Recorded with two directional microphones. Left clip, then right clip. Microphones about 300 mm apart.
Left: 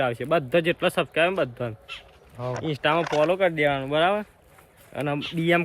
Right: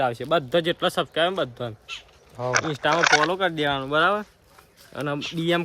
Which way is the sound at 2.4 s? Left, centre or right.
Right.